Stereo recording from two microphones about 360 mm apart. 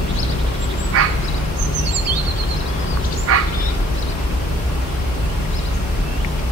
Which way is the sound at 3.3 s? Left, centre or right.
Right.